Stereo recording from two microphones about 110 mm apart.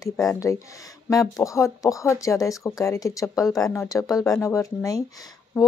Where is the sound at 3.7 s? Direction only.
30° left (ahead or behind).